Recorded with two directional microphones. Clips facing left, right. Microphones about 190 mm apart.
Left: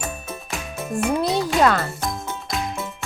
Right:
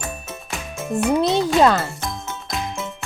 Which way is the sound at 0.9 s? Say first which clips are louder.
Right 3 dB; 25° right (ahead or behind).